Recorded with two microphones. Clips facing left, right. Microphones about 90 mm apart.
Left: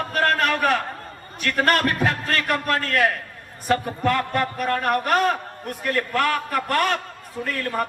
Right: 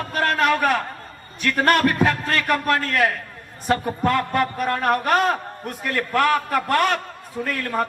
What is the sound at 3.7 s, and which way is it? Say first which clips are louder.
A man's voice: right 1 dB; 25° right (ahead or behind).